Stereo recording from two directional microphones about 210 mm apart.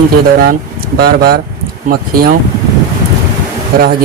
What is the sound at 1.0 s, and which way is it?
Speech, 45° right (ahead or behind).